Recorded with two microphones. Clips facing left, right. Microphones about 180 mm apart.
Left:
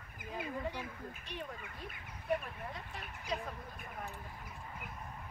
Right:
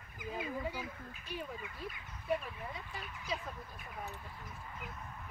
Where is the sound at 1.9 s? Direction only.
55° left (ahead or behind).